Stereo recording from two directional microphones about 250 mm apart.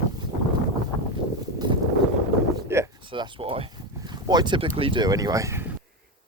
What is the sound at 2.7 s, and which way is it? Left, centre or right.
Speech, centre.